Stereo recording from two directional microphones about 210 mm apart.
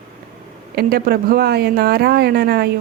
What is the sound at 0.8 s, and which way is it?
Speech, 45° right (ahead or behind).